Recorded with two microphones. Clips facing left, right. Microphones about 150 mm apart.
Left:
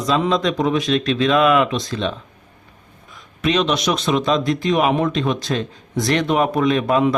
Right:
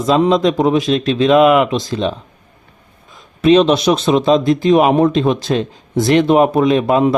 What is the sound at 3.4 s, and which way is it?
A man's voice, 30° right (ahead or behind).